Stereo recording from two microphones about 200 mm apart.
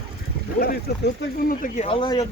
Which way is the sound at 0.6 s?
50° left (ahead or behind).